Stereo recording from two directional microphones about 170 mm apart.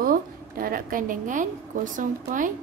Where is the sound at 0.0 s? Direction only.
55° right (ahead or behind).